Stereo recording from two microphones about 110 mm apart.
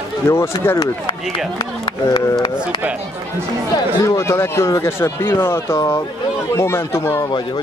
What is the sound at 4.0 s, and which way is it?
Speech, 25° left (ahead or behind).